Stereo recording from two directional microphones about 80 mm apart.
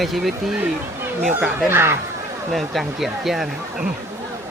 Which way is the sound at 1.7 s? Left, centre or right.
Right.